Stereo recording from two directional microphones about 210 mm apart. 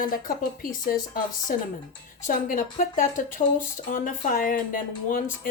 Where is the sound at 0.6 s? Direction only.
45° left (ahead or behind).